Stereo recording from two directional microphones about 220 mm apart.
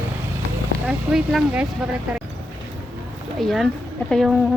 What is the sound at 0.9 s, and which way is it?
Speech, centre (ahead or behind).